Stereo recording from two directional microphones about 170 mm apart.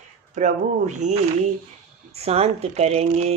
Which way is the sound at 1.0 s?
45° right (ahead or behind).